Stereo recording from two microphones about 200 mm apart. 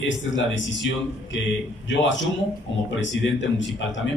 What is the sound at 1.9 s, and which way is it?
A man's voice, 65° left (ahead or behind).